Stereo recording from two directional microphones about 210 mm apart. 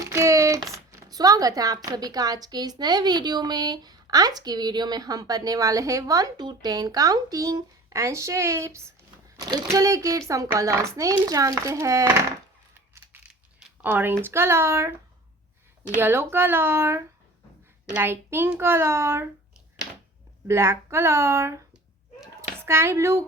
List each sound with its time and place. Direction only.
0.0 s speech: 15° right (ahead or behind)
13.1 s crushing: 10° right (ahead or behind)
13.6 s a sound: 10° right (ahead or behind)
14.3 s speech: 10° right (ahead or behind)
16.0 s speech: 10° right (ahead or behind)
20.5 s speech: 10° right (ahead or behind)